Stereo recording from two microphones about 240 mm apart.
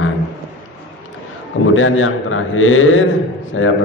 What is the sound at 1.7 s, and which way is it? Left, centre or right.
A man's voice, left.